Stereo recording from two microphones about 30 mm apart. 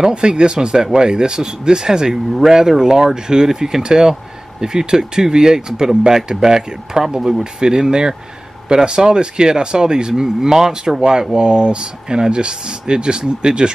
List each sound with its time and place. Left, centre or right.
0.1 s speech: right
10.2 s speech: centre
11.0 s speech: right